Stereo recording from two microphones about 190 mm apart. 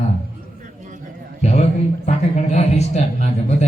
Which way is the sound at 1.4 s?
35° left (ahead or behind).